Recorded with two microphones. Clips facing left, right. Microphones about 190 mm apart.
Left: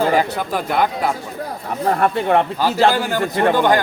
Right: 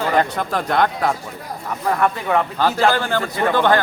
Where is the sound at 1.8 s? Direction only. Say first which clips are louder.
Left 3 dB; 30° left (ahead or behind).